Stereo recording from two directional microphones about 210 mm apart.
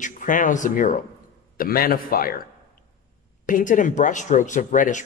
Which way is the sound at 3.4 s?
40° left (ahead or behind).